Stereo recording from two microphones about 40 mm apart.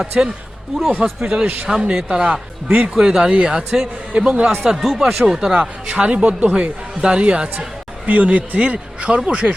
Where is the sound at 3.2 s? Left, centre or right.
Right.